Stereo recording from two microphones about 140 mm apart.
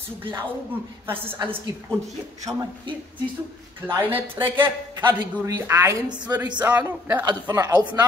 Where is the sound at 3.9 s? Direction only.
15° right (ahead or behind).